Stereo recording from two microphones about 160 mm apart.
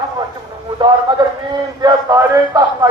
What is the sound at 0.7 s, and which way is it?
A man's voice, 25° right (ahead or behind).